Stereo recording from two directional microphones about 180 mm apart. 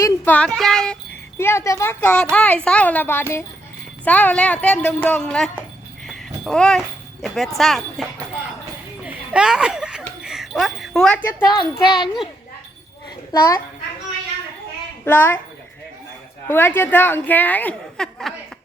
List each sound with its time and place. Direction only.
0.0 s speech: 10° left (ahead or behind)
1.4 s a woman's voice: 15° left (ahead or behind)
9.0 s a sound: 5° right (ahead or behind)
10.2 s speech: centre (ahead or behind)
11.4 s child singing: 25° left (ahead or behind)
11.9 s a child's voice: centre (ahead or behind)
13.3 s child singing: 20° left (ahead or behind)
15.0 s a woman's voice: 10° left (ahead or behind)
16.5 s a woman's voice: 10° left (ahead or behind)